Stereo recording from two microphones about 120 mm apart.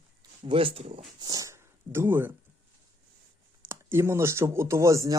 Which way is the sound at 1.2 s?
30° right (ahead or behind).